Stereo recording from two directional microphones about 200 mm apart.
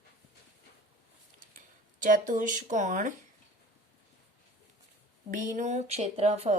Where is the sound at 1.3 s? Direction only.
40° right (ahead or behind).